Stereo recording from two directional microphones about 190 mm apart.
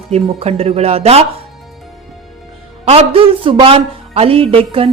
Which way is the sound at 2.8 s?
35° right (ahead or behind).